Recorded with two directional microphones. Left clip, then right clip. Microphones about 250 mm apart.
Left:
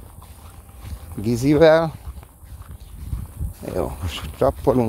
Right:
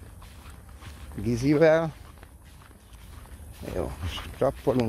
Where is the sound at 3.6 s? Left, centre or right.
Left.